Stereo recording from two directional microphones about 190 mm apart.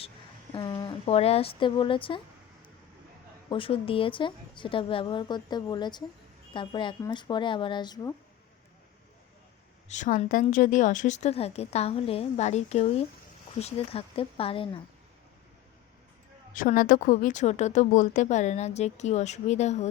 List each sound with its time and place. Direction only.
0.5 s a woman's voice: 20° left (ahead or behind)
3.5 s a woman's voice: 30° left (ahead or behind)
9.9 s a woman's voice: 40° left (ahead or behind)
16.6 s a woman's voice: 45° left (ahead or behind)